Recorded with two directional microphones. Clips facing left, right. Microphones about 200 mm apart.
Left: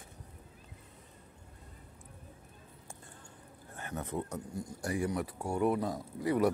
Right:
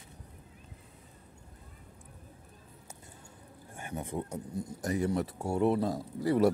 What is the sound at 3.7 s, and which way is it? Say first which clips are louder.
Speech: right 1 dB; 10° right (ahead or behind).